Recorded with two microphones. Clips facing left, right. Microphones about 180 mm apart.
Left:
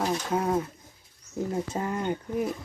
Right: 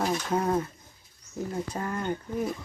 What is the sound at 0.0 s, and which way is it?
Speech, 5° left (ahead or behind).